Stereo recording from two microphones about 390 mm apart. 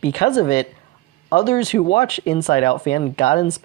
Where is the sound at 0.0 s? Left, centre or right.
Centre.